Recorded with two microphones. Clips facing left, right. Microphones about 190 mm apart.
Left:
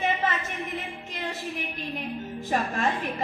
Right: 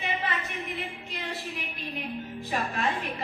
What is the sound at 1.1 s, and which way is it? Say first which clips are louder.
A woman's voice: left 6 dB; 45° left (ahead or behind).